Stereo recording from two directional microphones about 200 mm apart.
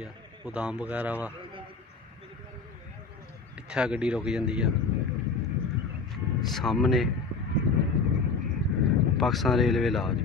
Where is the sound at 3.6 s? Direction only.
5° right (ahead or behind).